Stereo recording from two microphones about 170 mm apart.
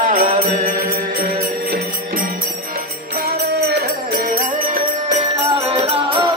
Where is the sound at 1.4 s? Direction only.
60° right (ahead or behind).